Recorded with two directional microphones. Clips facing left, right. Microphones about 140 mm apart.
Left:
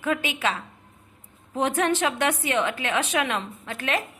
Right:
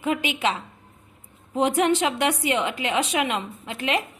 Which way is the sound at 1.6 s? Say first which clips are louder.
Right 3 dB; 10° right (ahead or behind).